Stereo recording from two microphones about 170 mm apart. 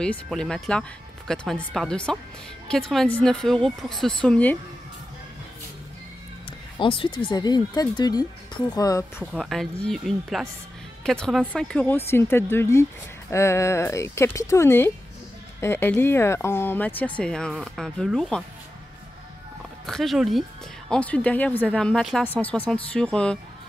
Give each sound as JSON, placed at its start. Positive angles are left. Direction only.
{"t": 0.0, "sound": "speech", "side_deg": 5}
{"t": 6.8, "sound": "speech", "side_deg": 30}
{"t": 9.3, "sound": "speech", "side_deg": 0}
{"t": 19.9, "sound": "speech", "side_deg": 0}